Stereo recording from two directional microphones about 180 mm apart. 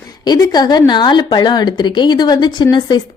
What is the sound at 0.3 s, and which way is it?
A woman's voice, 20° left (ahead or behind).